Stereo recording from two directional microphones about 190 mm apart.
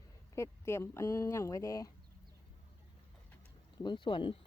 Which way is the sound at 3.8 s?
25° left (ahead or behind).